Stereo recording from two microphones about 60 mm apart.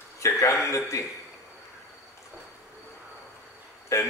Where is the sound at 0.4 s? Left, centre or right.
Left.